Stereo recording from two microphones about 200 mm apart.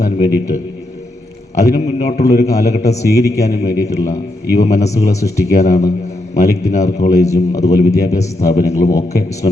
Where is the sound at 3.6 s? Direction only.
35° left (ahead or behind).